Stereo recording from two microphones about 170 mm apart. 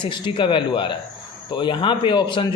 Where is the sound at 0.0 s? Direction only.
30° left (ahead or behind).